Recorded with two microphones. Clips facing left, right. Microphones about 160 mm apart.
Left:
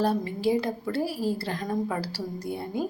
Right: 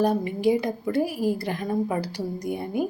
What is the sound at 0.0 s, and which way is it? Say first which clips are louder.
A woman's voice: right 3 dB; 15° right (ahead or behind).